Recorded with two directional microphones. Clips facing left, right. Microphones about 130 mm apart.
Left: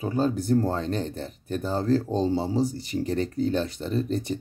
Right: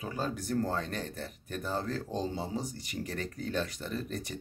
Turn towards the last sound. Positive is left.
turn(degrees=25)  # may be behind; listen again after turning